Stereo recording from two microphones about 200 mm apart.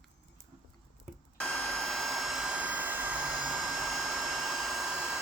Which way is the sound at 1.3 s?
5° left (ahead or behind).